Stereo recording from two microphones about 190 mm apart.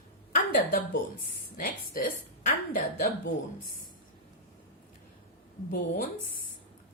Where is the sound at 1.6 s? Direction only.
45° left (ahead or behind).